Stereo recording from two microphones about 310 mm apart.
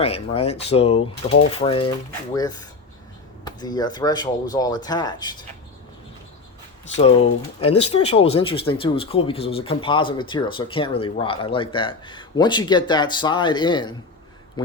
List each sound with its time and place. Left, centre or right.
0.0 s speech: centre
7.0 s speech: centre
7.7 s speech: left
7.9 s speech: centre